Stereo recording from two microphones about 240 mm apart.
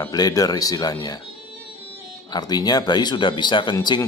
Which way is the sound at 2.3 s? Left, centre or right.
Centre.